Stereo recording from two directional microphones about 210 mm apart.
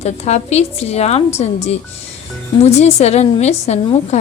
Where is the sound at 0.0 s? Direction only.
30° left (ahead or behind).